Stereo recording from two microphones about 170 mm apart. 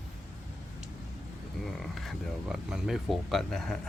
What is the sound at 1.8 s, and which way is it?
Speech, centre (ahead or behind).